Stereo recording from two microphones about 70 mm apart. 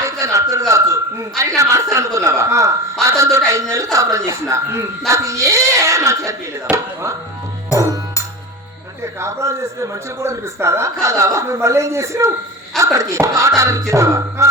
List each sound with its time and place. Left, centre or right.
0.0 s a sound: right
1.4 s speech: right
9.2 s speech: right